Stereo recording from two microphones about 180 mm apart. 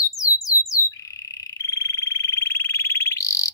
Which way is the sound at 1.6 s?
20° left (ahead or behind).